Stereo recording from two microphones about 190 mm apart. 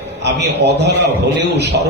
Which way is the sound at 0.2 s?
65° right (ahead or behind).